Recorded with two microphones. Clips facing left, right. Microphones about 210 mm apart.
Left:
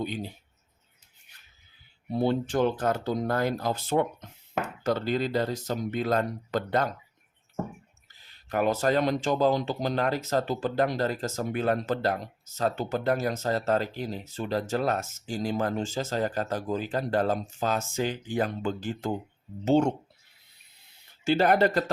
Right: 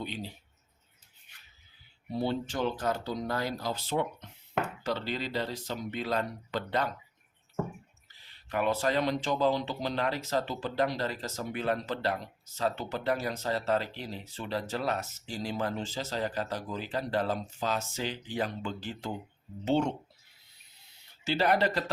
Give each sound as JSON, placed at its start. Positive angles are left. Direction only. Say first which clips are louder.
{"t": 0.0, "sound": "speech", "louder": "left 6 dB", "side_deg": 45}
{"t": 2.1, "sound": "speech", "louder": "left 6 dB", "side_deg": 50}
{"t": 8.0, "sound": "speech", "louder": "left 1 dB", "side_deg": 45}
{"t": 21.2, "sound": "speech", "louder": "left 5 dB", "side_deg": 50}